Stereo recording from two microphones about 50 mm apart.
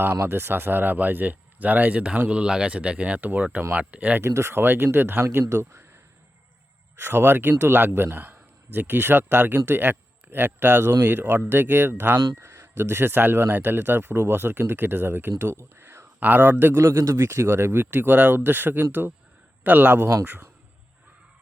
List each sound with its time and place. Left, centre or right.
0.0 s a man's voice: right
4.2 s speech: right
4.5 s a man's voice: right
7.0 s a man's voice: right
12.4 s a sound: right
12.8 s a man's voice: right
16.8 s a man's voice: right
20.0 s a man's voice: right